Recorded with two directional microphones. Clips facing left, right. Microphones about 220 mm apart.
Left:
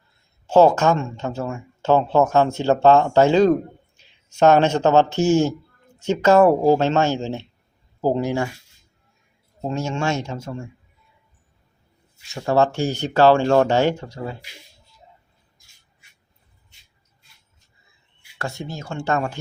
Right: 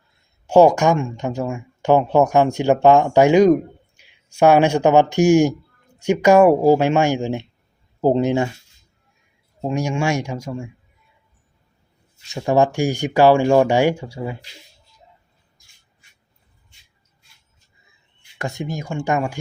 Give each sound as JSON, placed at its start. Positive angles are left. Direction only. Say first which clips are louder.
{"t": 0.4, "sound": "speech", "louder": "right 2 dB", "side_deg": -15}
{"t": 9.6, "sound": "speech", "louder": "right 3 dB", "side_deg": -15}
{"t": 12.3, "sound": "speech", "louder": "right 2 dB", "side_deg": -15}
{"t": 18.3, "sound": "speech", "louder": "right 4 dB", "side_deg": -15}